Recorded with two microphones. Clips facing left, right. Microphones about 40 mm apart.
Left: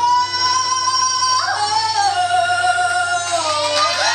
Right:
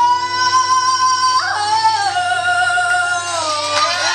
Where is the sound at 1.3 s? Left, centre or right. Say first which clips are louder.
Right 3 dB; centre.